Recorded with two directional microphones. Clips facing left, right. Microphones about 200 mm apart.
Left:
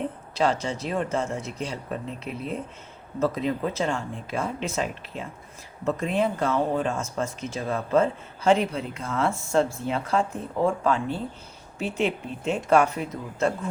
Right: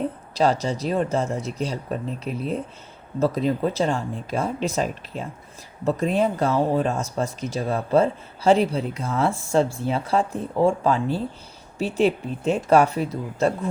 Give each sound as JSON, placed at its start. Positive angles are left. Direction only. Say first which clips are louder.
{"t": 0.0, "sound": "speech", "louder": "right 3 dB", "side_deg": -35}